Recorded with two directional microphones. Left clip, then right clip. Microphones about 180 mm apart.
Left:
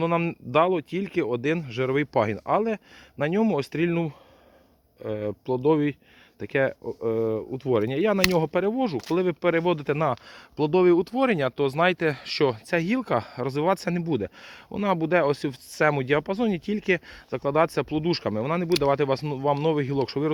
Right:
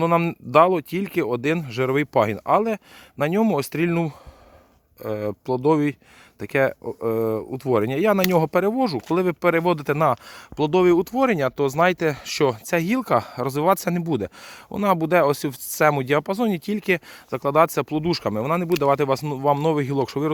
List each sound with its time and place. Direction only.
0.0 s speech: 45° right (ahead or behind)